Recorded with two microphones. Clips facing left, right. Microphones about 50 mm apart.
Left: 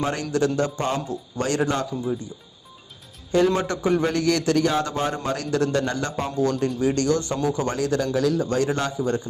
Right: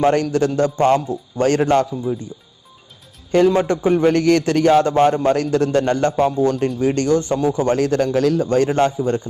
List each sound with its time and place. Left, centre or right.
0.0 s a man's voice: right
3.5 s a man's voice: right
8.4 s a man's voice: right